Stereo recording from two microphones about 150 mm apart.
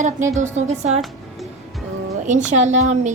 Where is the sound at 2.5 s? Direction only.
50° right (ahead or behind).